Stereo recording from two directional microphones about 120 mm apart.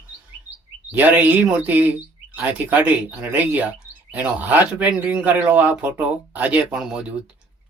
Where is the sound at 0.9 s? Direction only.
15° right (ahead or behind).